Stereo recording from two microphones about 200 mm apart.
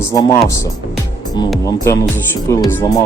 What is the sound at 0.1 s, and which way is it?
Speech, 15° left (ahead or behind).